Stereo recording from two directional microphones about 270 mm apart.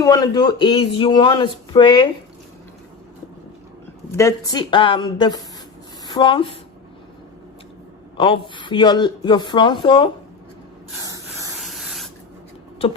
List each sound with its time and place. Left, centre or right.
0.0 s a man's voice: centre
4.2 s a man's voice: centre
8.2 s a man's voice: centre
11.0 s spray: centre
11.6 s spray: centre